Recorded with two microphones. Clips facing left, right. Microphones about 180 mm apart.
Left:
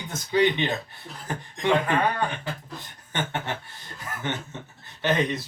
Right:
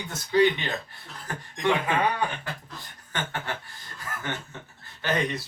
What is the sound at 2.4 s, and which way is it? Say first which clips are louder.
Beatboxing: left 3 dB; 20° left (ahead or behind).